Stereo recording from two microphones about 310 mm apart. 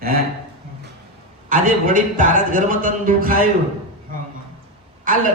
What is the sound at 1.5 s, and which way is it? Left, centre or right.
Speech, right.